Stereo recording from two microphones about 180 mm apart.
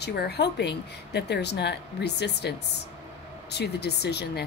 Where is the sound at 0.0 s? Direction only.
65° left (ahead or behind).